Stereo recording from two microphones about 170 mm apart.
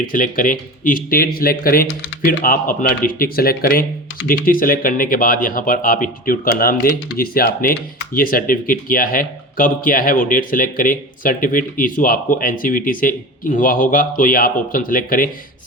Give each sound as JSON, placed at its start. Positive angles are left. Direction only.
{"t": 0.1, "sound": "speech", "side_deg": 55}